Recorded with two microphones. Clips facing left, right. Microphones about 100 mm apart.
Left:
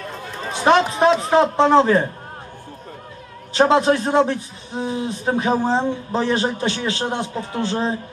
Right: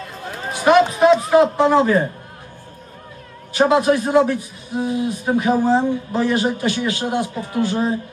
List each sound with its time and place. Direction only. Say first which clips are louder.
0.5 s a sound: right 2 dB; 25° left (ahead or behind)
1.6 s a man's voice: left 1 dB; 25° left (ahead or behind)
3.8 s a man's voice: right 1 dB; 25° left (ahead or behind)